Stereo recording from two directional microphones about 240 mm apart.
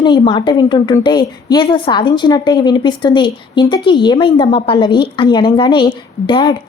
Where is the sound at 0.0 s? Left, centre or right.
Centre.